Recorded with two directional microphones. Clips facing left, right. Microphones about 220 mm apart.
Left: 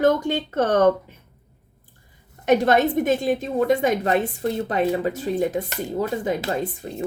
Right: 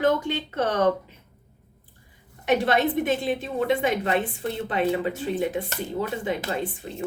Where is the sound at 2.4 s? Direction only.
45° left (ahead or behind).